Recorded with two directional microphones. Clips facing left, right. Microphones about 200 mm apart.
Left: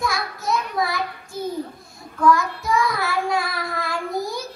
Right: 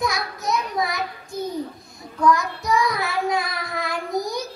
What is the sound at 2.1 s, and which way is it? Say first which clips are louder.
Child singing: left 1 dB; 20° right (ahead or behind).